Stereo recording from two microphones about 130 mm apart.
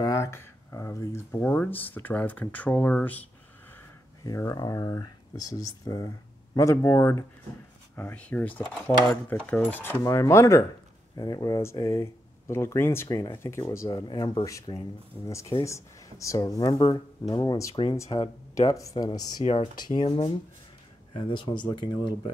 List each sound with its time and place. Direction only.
0.0 s speech: 25° left (ahead or behind)
4.2 s speech: 25° left (ahead or behind)
13.8 s speech: 35° left (ahead or behind)